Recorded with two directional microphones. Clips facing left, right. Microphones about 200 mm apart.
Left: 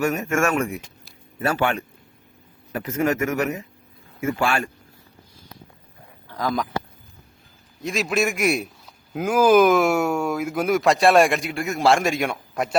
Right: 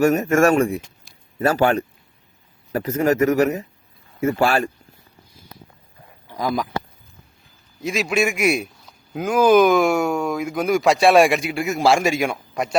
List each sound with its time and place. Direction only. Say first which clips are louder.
0.0 s speech: right 6 dB; 40° right (ahead or behind)
6.2 s a sound: right 2 dB; 10° right (ahead or behind)
7.8 s a man's voice: right 2 dB; centre (ahead or behind)